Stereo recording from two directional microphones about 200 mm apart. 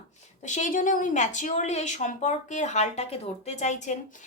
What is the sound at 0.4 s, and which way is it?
A woman's voice, 40° left (ahead or behind).